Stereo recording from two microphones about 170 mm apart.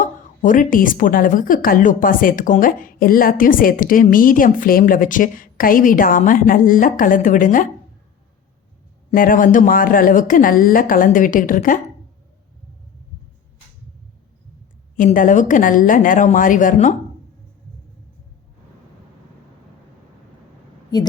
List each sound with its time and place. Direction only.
0.0 s a woman's voice: 50° left (ahead or behind)
9.1 s a woman's voice: 55° left (ahead or behind)
14.9 s a woman's voice: 50° left (ahead or behind)